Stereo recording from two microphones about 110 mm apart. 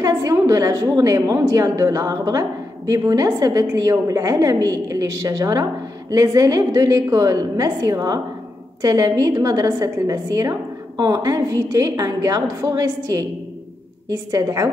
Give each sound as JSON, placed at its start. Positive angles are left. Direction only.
{"t": 0.0, "sound": "a woman's voice", "side_deg": -35}